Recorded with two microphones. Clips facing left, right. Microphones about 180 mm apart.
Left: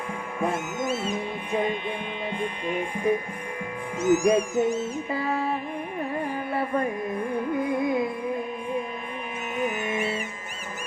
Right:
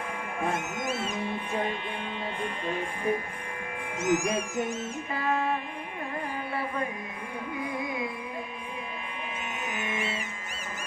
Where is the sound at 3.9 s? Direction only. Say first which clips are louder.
Left 7 dB; 30° left (ahead or behind).